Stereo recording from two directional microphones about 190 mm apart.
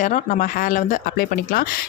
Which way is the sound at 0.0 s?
45° left (ahead or behind).